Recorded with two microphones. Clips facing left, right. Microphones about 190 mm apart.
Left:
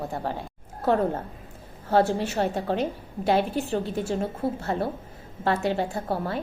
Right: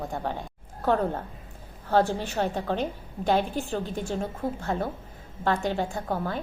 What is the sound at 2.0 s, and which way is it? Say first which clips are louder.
Speech: left 4 dB; 40° left (ahead or behind).